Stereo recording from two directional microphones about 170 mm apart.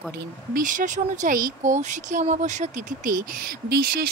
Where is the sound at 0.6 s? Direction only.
50° right (ahead or behind).